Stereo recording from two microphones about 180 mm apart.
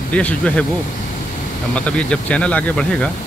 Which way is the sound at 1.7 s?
5° left (ahead or behind).